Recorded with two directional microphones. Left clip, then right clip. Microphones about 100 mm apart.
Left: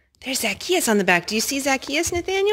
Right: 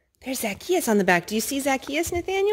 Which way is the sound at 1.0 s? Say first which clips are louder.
Left 2 dB; 30° right (ahead or behind).